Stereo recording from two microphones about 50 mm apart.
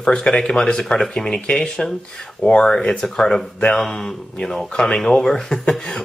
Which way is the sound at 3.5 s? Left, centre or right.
Left.